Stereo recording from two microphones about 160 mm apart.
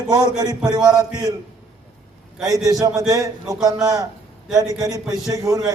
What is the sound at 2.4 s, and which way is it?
A man's voice, 20° right (ahead or behind).